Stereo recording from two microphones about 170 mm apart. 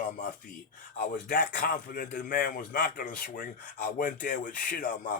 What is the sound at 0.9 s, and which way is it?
A man's voice, 55° left (ahead or behind).